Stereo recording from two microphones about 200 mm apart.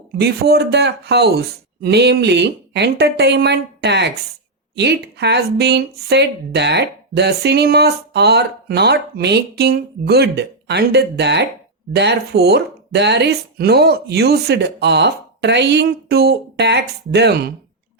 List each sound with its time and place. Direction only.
0.2 s speech: 55° right (ahead or behind)